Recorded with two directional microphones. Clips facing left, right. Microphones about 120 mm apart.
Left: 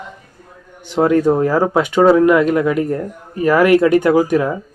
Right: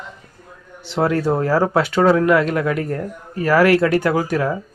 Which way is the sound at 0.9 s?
15° left (ahead or behind).